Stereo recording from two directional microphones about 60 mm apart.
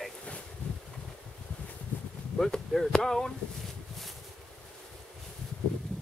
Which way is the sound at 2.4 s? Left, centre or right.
Centre.